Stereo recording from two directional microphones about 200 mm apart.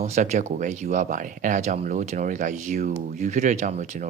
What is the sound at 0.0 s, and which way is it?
Speech, 35° right (ahead or behind).